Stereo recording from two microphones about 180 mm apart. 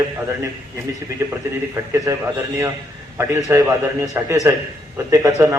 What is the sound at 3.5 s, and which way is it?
A man's voice, 15° right (ahead or behind).